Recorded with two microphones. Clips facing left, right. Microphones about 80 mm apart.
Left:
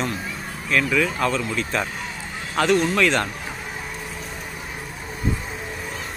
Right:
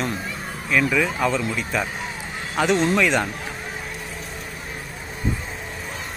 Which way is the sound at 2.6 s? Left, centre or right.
Centre.